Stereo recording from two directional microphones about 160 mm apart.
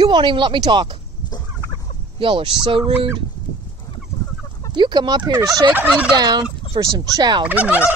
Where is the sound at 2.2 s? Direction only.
35° right (ahead or behind).